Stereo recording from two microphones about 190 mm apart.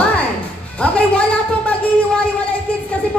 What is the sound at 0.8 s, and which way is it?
Speech, 5° left (ahead or behind).